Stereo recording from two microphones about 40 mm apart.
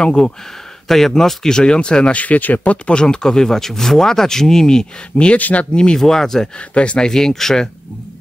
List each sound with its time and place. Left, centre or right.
0.0 s speech: centre
0.8 s speech: centre
2.1 s speech: left
2.9 s speech: left
5.1 s speech: left
5.9 s speech: centre
6.7 s speech: left
7.1 s speech: centre